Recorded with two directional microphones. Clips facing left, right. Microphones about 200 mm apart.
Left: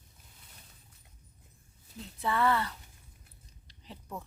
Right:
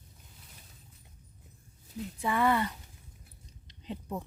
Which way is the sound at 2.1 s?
15° right (ahead or behind).